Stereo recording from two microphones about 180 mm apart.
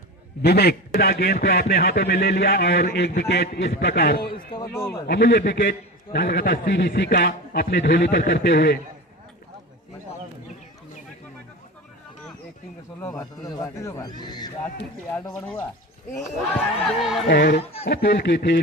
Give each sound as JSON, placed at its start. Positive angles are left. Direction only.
{"t": 0.4, "sound": "speech", "side_deg": 65}
{"t": 4.5, "sound": "speech", "side_deg": 15}
{"t": 5.0, "sound": "a man's voice", "side_deg": 75}
{"t": 13.0, "sound": "a man's voice", "side_deg": 20}
{"t": 16.7, "sound": "speech", "side_deg": 0}
{"t": 17.2, "sound": "a man's voice", "side_deg": 75}